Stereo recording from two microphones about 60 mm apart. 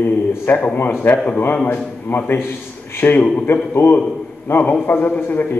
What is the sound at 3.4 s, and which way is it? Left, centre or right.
A man's voice, left.